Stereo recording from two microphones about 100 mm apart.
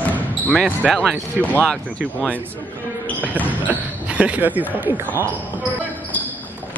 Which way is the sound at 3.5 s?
15° right (ahead or behind).